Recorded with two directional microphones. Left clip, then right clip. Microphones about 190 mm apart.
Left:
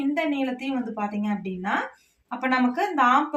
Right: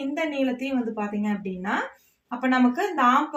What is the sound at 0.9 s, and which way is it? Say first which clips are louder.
A woman's voice: even; 35° left (ahead or behind).